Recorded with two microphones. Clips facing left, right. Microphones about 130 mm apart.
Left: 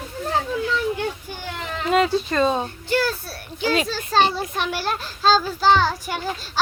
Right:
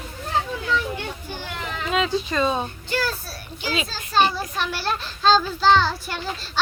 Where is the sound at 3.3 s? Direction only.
60° left (ahead or behind).